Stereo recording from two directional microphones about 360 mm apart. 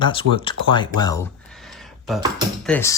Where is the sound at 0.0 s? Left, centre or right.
Centre.